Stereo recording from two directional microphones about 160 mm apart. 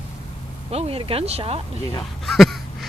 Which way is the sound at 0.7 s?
35° right (ahead or behind).